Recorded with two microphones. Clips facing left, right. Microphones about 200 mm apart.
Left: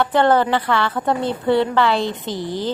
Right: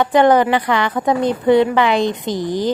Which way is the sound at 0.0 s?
15° right (ahead or behind).